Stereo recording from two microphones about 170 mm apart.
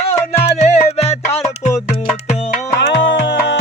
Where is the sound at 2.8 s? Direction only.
90° left.